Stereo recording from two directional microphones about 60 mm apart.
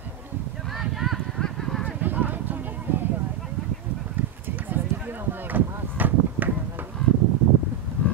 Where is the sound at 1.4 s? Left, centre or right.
Centre.